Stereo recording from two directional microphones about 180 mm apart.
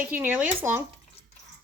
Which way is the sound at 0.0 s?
10° right (ahead or behind).